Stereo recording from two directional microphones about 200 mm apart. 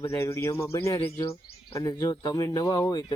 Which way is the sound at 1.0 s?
30° left (ahead or behind).